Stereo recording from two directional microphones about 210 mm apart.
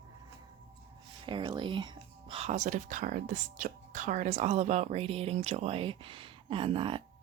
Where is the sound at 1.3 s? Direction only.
25° right (ahead or behind).